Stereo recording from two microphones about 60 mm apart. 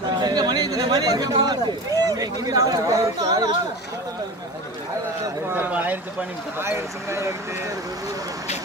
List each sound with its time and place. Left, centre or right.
0.2 s chatter: right
5.5 s a sound: right
6.6 s speech: right